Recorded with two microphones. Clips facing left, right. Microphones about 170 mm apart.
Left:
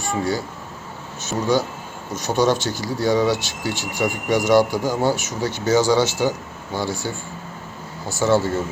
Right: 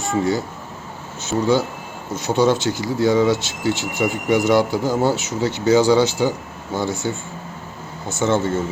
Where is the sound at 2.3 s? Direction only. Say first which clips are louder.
Right 2 dB; 20° left (ahead or behind).